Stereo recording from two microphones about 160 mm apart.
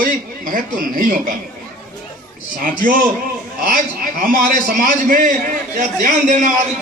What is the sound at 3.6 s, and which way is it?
A man's voice, 60° right (ahead or behind).